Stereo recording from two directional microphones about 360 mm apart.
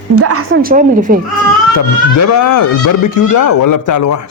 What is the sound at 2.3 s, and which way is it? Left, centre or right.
A man's voice, left.